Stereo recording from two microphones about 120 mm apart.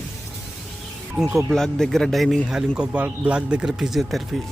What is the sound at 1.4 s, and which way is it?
Speech, 5° left (ahead or behind).